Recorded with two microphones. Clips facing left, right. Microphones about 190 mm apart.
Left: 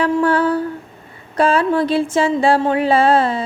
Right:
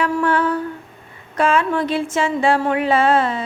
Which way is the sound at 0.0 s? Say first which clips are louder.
Left 3 dB; 35° left (ahead or behind).